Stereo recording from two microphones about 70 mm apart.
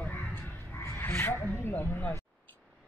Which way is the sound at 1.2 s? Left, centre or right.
Left.